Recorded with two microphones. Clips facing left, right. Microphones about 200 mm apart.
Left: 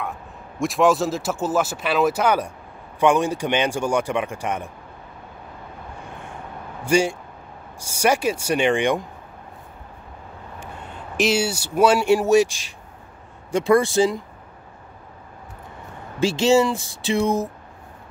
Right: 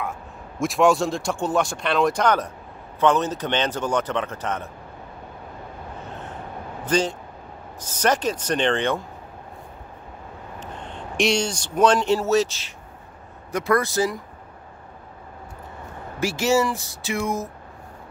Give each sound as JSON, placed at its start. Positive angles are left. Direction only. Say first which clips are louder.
{"t": 0.0, "sound": "a man's voice", "louder": "even", "side_deg": 0}
{"t": 6.0, "sound": "vehicle", "louder": "right 2 dB", "side_deg": 10}
{"t": 6.8, "sound": "a man's voice", "louder": "left 3 dB", "side_deg": 10}
{"t": 10.6, "sound": "speech", "louder": "right 2 dB", "side_deg": 5}
{"t": 13.5, "sound": "speech", "louder": "left 4 dB", "side_deg": 25}
{"t": 16.2, "sound": "speech", "louder": "left 4 dB", "side_deg": 25}